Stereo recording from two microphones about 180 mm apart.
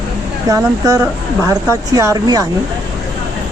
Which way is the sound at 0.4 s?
20° right (ahead or behind).